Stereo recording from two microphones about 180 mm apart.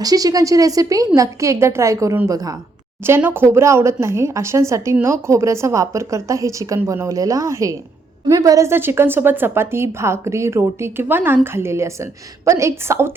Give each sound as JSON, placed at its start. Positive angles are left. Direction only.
{"t": 0.0, "sound": "a woman's voice", "side_deg": -20}